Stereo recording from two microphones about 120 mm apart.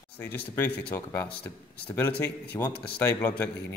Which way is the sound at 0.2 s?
20° left (ahead or behind).